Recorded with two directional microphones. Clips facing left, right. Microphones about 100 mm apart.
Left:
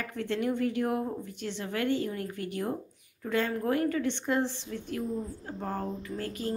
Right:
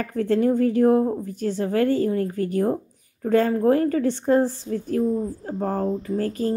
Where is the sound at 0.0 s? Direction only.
40° right (ahead or behind).